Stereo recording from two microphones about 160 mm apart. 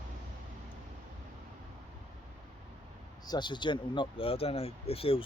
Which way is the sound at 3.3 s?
30° left (ahead or behind).